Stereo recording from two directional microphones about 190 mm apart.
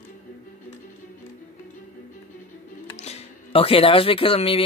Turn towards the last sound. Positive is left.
turn(degrees=30)  # may be behind; listen again after turning